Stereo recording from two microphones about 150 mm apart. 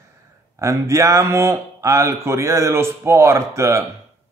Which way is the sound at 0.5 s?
20° right (ahead or behind).